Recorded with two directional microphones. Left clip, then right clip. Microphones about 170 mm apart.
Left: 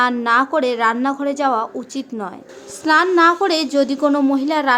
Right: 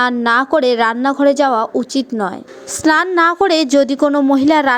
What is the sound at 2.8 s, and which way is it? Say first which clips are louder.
Music: right 1 dB; 45° right (ahead or behind).